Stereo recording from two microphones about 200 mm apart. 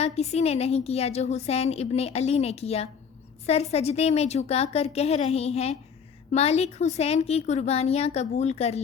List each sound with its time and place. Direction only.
0.0 s a woman's voice: 30° left (ahead or behind)